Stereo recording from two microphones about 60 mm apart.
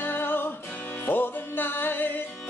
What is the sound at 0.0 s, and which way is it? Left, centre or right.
Music, left.